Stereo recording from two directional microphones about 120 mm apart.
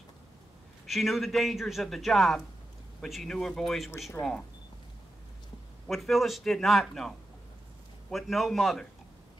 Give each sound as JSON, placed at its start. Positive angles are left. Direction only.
{"t": 0.8, "sound": "a man's voice", "side_deg": 0}
{"t": 4.2, "sound": "speech", "side_deg": 35}
{"t": 5.9, "sound": "a man's voice", "side_deg": 0}